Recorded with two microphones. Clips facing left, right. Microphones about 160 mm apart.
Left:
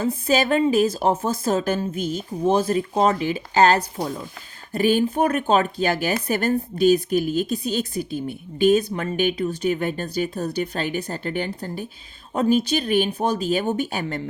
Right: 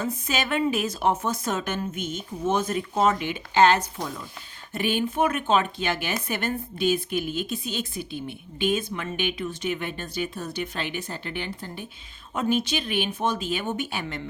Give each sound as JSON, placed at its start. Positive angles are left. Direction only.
{"t": 0.0, "sound": "a woman's voice", "side_deg": 35}